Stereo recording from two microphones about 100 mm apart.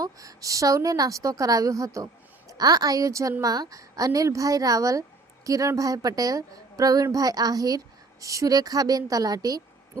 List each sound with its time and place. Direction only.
0.0 s a woman's voice: 35° right (ahead or behind)